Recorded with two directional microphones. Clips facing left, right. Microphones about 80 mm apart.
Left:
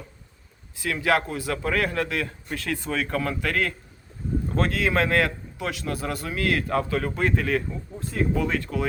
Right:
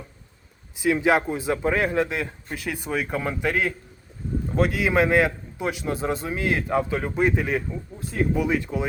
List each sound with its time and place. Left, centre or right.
0.8 s a man's voice: centre